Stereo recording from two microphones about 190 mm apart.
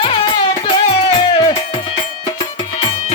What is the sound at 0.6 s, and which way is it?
Music, 30° left (ahead or behind).